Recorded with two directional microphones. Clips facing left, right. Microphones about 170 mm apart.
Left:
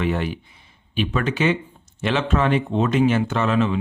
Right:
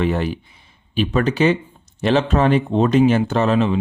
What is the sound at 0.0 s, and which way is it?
Speech, 35° right (ahead or behind).